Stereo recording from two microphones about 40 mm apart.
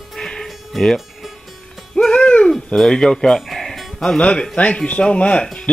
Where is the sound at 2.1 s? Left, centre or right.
Left.